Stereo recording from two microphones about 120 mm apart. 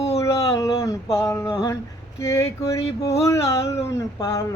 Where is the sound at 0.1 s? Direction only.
25° left (ahead or behind).